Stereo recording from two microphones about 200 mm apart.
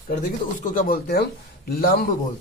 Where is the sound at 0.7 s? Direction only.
45° left (ahead or behind).